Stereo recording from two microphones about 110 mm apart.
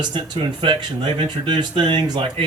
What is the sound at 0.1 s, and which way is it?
Speech, 50° right (ahead or behind).